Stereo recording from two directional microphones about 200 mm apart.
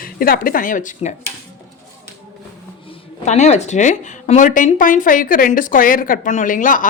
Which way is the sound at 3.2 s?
35° left (ahead or behind).